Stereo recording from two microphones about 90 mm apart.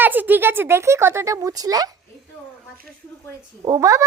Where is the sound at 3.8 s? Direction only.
40° right (ahead or behind).